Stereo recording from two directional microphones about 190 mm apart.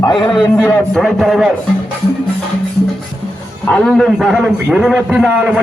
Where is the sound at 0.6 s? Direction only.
5° left (ahead or behind).